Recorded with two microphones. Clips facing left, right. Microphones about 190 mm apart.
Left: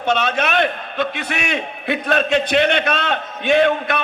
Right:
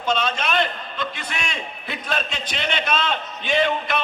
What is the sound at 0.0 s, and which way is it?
A man's voice, 65° left (ahead or behind).